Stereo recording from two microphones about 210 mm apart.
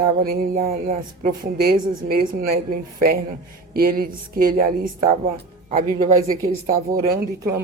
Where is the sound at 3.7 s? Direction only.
45° right (ahead or behind).